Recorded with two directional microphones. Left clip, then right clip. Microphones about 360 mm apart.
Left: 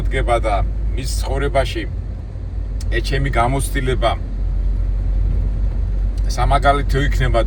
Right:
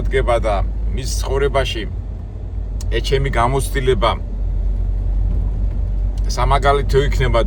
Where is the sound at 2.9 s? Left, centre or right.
Centre.